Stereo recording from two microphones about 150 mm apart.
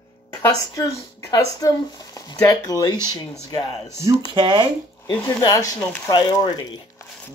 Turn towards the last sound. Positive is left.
turn(degrees=30)  # may be behind; listen again after turning